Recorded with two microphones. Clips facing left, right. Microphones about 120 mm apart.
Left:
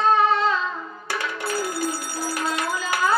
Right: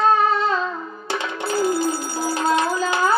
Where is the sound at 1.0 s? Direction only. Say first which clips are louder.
Right 3 dB; 25° right (ahead or behind).